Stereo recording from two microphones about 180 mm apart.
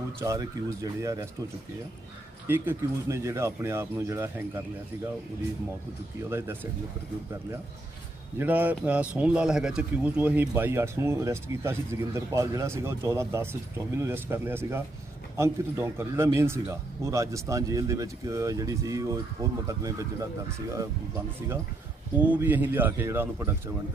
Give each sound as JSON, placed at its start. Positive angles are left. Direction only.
{"t": 0.2, "sound": "speech", "side_deg": -15}
{"t": 2.5, "sound": "speech", "side_deg": -15}
{"t": 6.3, "sound": "speech", "side_deg": -10}
{"t": 8.4, "sound": "speech", "side_deg": -10}
{"t": 22.1, "sound": "speech", "side_deg": -10}